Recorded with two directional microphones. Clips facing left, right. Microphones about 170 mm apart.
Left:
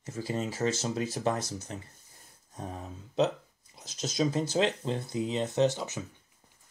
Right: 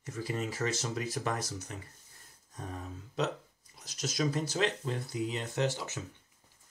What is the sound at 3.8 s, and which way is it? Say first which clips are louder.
Speech: left 3 dB; 25° left (ahead or behind).